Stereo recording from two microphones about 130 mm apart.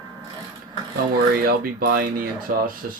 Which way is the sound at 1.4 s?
90° right.